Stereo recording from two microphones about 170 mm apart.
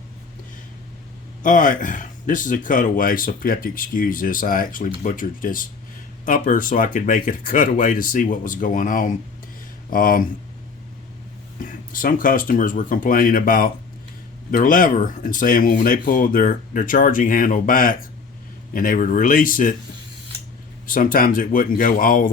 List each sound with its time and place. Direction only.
1.4 s speech: 50° left (ahead or behind)
11.6 s speech: 55° left (ahead or behind)
20.8 s speech: 55° left (ahead or behind)